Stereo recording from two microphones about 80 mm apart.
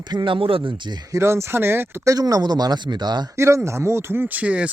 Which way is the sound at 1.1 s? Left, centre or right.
Right.